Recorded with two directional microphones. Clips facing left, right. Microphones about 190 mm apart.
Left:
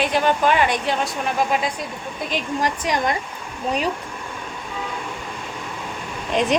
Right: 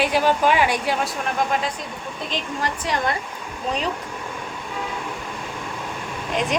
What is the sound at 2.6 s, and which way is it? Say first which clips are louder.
Speech: left 1 dB; 15° left (ahead or behind).